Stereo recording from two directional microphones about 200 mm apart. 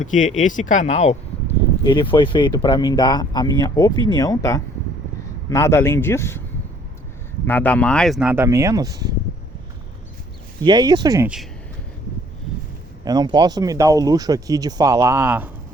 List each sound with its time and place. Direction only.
0.0 s speech: 40° left (ahead or behind)
1.8 s a man's voice: 25° left (ahead or behind)
7.4 s speech: 10° left (ahead or behind); by 9.1 s 20° right (ahead or behind)
10.6 s speech: 20° right (ahead or behind)
13.1 s speech: 20° right (ahead or behind)